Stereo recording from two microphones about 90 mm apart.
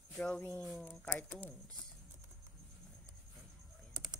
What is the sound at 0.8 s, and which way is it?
Speech, 20° left (ahead or behind).